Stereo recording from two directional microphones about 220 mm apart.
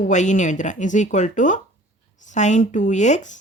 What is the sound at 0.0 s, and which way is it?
Speech, 35° left (ahead or behind).